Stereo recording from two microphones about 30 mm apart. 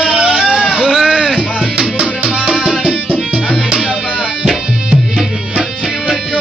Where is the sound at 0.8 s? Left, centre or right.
Centre.